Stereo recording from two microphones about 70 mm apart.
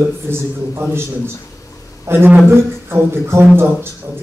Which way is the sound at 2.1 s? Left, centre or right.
Right.